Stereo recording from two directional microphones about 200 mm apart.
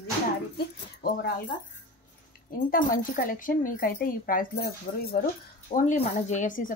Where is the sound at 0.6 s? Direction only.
50° left (ahead or behind).